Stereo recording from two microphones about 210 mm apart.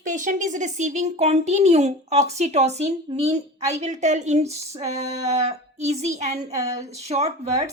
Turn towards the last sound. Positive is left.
turn(degrees=-30)  # may be behind; listen again after turning